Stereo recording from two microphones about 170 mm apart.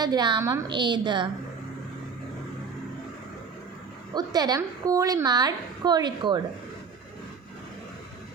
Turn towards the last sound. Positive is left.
turn(degrees=-25)  # may be behind; listen again after turning